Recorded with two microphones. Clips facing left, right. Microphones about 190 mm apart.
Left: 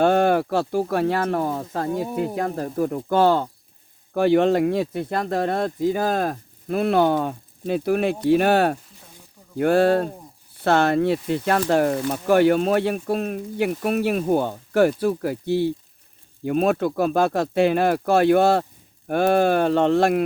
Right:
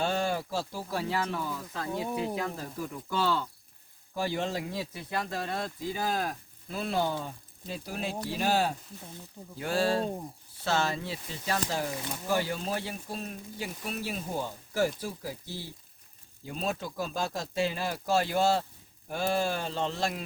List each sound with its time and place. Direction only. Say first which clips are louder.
0.0 s speech: left 12 dB; 60° left (ahead or behind)
4.1 s speech: left 14 dB; 65° left (ahead or behind)